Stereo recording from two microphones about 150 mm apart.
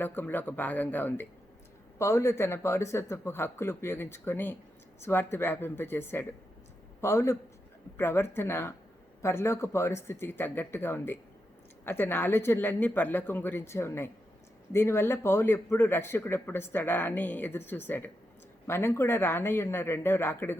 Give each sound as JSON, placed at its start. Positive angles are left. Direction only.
{"t": 0.0, "sound": "a man's voice", "side_deg": 15}